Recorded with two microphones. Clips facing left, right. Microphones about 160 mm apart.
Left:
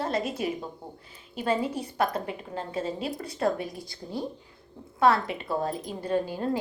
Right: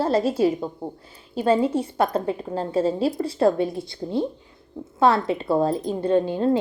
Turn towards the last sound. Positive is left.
turn(degrees=-25)  # may be behind; listen again after turning